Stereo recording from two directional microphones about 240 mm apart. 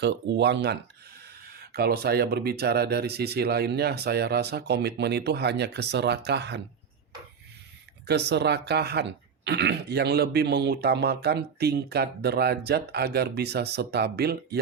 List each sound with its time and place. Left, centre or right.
0.0 s speech: right
8.0 s speech: right